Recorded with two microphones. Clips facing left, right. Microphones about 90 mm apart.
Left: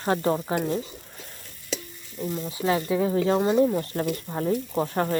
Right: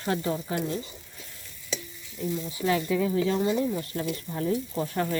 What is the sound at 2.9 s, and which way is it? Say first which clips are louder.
Speech: left 3 dB; 40° left (ahead or behind).